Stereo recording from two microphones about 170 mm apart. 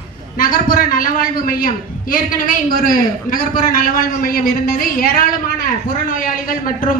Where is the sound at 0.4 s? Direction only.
55° left (ahead or behind).